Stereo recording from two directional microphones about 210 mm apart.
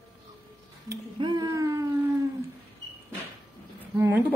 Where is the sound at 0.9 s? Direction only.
20° right (ahead or behind).